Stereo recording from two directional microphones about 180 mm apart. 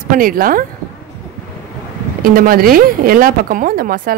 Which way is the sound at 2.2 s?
55° right (ahead or behind).